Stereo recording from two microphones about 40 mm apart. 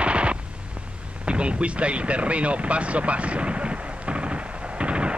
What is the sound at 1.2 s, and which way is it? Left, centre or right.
Artillery fire, right.